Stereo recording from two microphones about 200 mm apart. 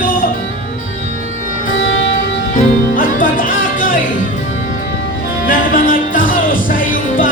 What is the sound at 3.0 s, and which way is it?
Music, 45° left (ahead or behind).